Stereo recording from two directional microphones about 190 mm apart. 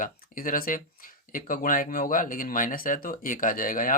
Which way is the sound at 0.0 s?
45° left (ahead or behind).